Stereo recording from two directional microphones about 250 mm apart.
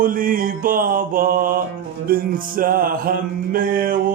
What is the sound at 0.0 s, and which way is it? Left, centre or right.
Music, right.